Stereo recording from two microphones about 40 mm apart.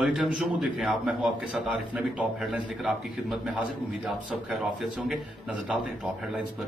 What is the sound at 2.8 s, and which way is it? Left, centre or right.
Speech, centre.